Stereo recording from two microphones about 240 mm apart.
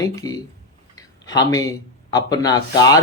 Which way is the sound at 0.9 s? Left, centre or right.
Centre.